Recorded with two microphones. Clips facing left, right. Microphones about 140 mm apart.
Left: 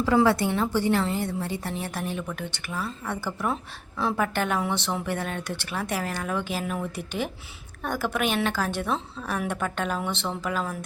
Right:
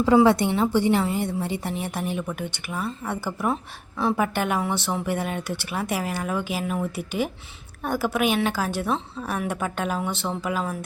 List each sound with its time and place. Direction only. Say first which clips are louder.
0.0 s a woman's voice: right 4 dB; 20° right (ahead or behind); by 10.8 s 5° right (ahead or behind)